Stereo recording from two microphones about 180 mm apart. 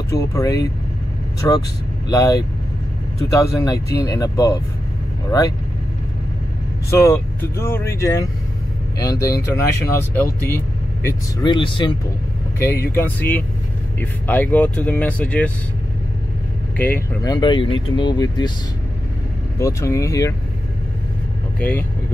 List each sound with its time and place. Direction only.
0.1 s speech: 20° left (ahead or behind)
6.9 s speech: 15° left (ahead or behind)
11.4 s speech: 25° left (ahead or behind)
12.5 s speech: 15° left (ahead or behind)
16.7 s speech: 10° left (ahead or behind)
17.3 s speech: 25° left (ahead or behind)
19.6 s speech: 15° left (ahead or behind)
21.5 s speech: 10° left (ahead or behind)